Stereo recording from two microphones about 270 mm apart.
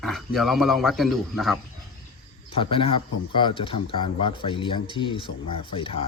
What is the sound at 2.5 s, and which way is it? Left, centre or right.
Speech, centre.